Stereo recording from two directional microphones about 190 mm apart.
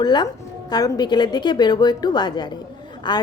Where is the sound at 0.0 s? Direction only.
20° left (ahead or behind).